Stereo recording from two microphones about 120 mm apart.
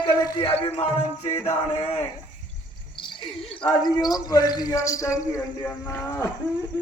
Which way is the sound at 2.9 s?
40° left (ahead or behind).